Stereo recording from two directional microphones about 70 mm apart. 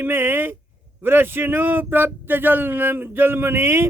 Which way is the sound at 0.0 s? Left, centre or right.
Right.